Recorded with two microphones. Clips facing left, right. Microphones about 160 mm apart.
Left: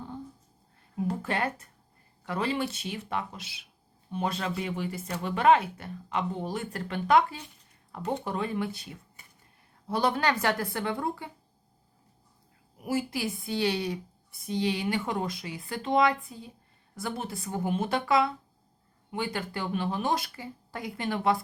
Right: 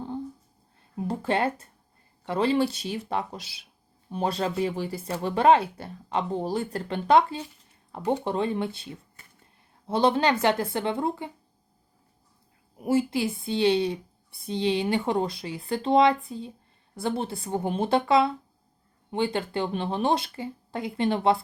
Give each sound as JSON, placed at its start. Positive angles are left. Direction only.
{"t": 0.9, "sound": "a woman's voice", "side_deg": -30}
{"t": 12.8, "sound": "a woman's voice", "side_deg": -25}